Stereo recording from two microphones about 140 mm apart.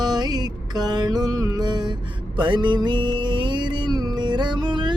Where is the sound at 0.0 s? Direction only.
30° right (ahead or behind).